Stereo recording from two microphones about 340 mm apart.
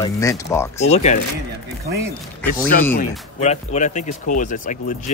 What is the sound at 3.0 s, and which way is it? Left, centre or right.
Speech, centre.